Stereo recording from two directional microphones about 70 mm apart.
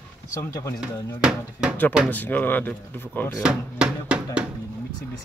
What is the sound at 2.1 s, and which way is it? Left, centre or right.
Speech, left.